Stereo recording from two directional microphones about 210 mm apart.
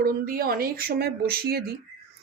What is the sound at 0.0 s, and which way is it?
Speech, 45° right (ahead or behind).